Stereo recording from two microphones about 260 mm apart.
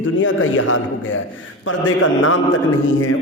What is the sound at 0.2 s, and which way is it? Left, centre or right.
A man's voice, left.